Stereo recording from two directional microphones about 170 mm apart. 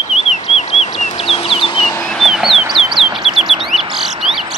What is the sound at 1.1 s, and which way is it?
Chicken, 35° left (ahead or behind).